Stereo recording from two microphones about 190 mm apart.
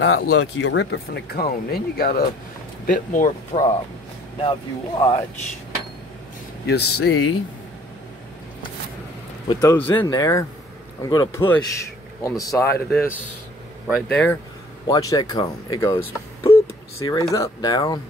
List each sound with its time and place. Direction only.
0.0 s speech: 90° left; by 3.7 s 35° left (ahead or behind)
4.4 s speech: 25° left (ahead or behind)
6.6 s speech: 60° left (ahead or behind); by 7.3 s 90° left
9.5 s speech: 15° left (ahead or behind)
13.8 s speech: centre (ahead or behind)
14.9 s speech: 20° left (ahead or behind)
17.0 s speech: 15° left (ahead or behind)